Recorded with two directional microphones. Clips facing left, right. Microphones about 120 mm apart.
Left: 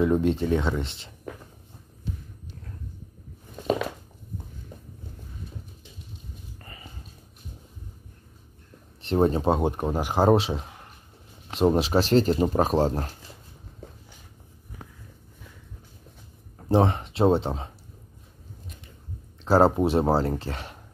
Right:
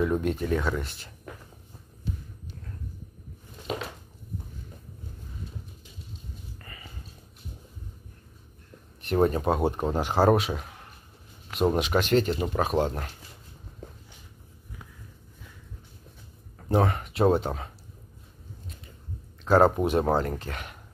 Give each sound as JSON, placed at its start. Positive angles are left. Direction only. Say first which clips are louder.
{"t": 0.0, "sound": "speech", "louder": "left 4 dB", "side_deg": 25}
{"t": 6.6, "sound": "a sound", "louder": "left 1 dB", "side_deg": 30}
{"t": 9.0, "sound": "speech", "louder": "left 2 dB", "side_deg": 25}
{"t": 9.7, "sound": "speech", "louder": "even", "side_deg": 10}
{"t": 10.3, "sound": "speech", "louder": "left 3 dB", "side_deg": 30}
{"t": 11.7, "sound": "speech", "louder": "left 2 dB", "side_deg": 35}
{"t": 16.5, "sound": "speech", "louder": "left 3 dB", "side_deg": 25}
{"t": 19.4, "sound": "speech", "louder": "left 1 dB", "side_deg": 30}